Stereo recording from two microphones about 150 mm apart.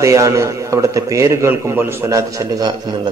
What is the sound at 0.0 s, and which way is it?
A man's voice, 20° right (ahead or behind).